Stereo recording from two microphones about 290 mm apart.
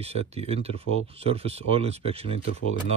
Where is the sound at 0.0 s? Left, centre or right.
Right.